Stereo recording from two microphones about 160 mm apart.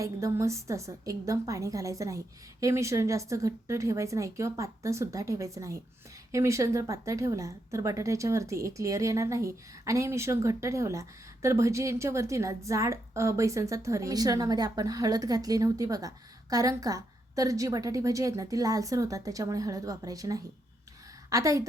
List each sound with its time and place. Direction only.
0.0 s a woman's voice: 20° right (ahead or behind)